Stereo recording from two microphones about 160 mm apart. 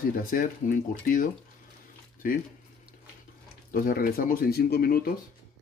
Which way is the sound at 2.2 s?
60° left (ahead or behind).